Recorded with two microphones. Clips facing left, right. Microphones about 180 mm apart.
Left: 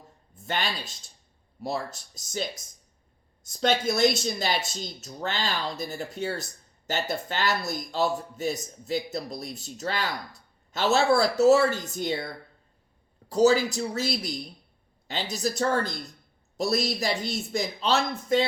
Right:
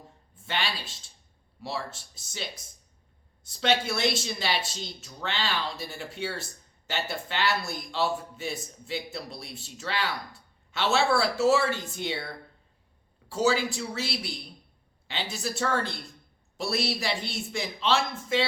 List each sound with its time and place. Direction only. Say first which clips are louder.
0.3 s speech: left 2 dB; 45° left (ahead or behind)